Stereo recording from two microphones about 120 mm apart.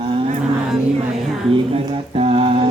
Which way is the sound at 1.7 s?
55° right (ahead or behind).